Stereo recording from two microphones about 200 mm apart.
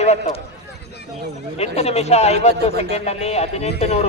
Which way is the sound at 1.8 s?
30° left (ahead or behind).